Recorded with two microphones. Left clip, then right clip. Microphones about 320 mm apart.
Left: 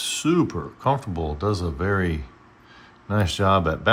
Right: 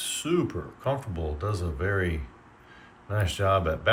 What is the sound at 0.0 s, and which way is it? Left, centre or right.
Speech, centre.